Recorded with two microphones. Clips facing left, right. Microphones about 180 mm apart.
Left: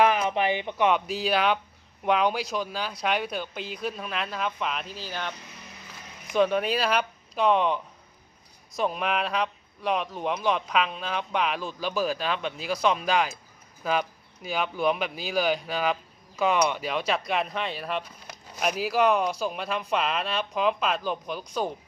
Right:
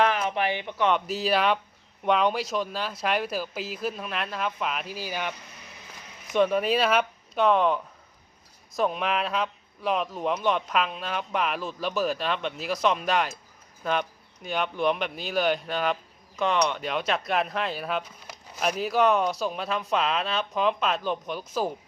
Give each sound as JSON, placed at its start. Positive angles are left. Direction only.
{"t": 0.0, "sound": "speech", "side_deg": 15}
{"t": 0.9, "sound": "speech", "side_deg": 0}
{"t": 6.3, "sound": "speech", "side_deg": 0}